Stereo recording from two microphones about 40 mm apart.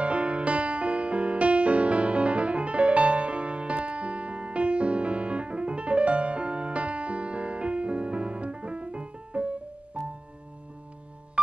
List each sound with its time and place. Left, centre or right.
0.0 s music: right